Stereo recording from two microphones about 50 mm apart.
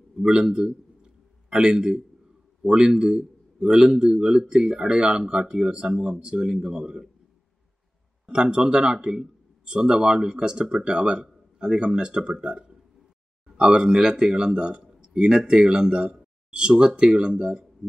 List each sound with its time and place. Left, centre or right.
0.1 s a sound: centre
2.6 s speech: centre
8.3 s speech: centre